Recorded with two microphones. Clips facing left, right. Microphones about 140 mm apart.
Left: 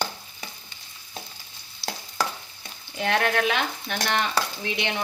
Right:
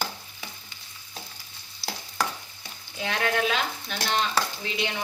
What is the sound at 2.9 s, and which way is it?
Speech, 60° left (ahead or behind).